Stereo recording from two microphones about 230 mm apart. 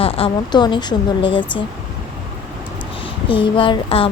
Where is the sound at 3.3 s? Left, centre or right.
Left.